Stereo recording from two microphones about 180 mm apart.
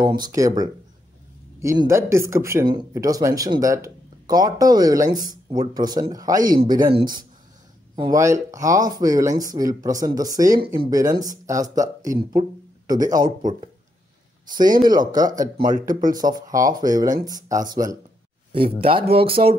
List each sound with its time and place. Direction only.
0.0 s speech: 25° right (ahead or behind)